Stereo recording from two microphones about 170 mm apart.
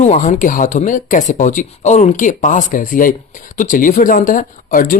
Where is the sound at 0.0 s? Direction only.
45° left (ahead or behind).